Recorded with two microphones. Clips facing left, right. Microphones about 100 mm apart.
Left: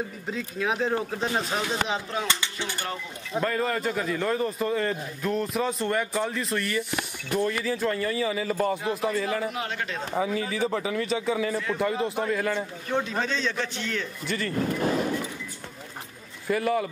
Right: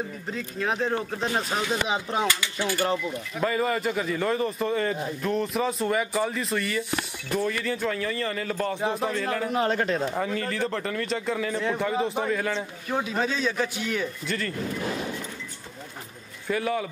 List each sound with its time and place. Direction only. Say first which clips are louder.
0.3 s a man's voice: left 1 dB; centre (ahead or behind)
1.9 s speech: right 3 dB; 20° right (ahead or behind)
2.2 s dishes: right 3 dB; 25° left (ahead or behind)
3.3 s a man's voice: even; 5° right (ahead or behind)
9.5 s speech: right 7 dB; 40° right (ahead or behind)
10.1 s a man's voice: left 1 dB; 5° left (ahead or behind)
16.4 s a man's voice: left 2 dB; centre (ahead or behind)